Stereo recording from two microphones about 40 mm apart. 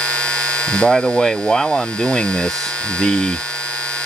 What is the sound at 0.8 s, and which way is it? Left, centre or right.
Speech, centre.